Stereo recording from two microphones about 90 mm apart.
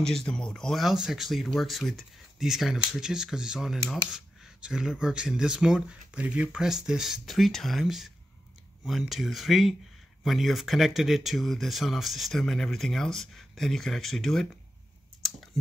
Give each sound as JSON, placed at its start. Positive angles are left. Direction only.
{"t": 0.0, "sound": "speech", "side_deg": 5}
{"t": 9.1, "sound": "speech", "side_deg": 0}